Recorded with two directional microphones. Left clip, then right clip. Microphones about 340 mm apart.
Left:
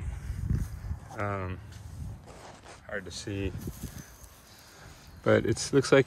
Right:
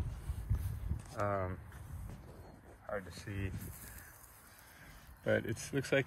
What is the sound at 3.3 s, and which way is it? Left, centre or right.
Speech, centre.